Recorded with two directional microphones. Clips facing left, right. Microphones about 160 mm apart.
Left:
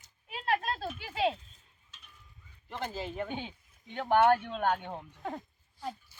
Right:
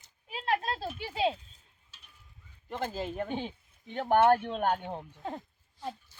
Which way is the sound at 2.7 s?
50° right (ahead or behind).